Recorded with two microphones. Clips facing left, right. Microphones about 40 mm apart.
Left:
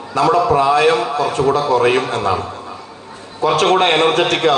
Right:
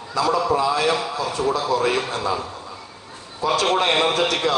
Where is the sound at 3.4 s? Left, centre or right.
Left.